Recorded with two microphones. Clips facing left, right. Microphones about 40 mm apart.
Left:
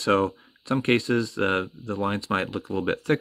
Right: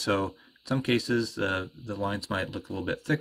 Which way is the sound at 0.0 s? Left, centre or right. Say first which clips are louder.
Left 6 dB; left.